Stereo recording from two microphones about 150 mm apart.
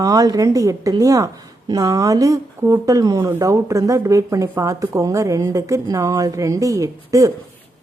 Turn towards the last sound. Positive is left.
turn(degrees=-20)  # may be behind; listen again after turning